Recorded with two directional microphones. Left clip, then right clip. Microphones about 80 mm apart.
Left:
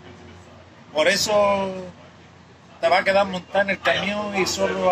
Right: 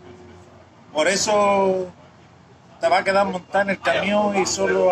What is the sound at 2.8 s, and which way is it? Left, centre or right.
Speech, centre.